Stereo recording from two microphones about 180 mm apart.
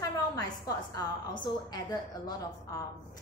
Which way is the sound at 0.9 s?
25° left (ahead or behind).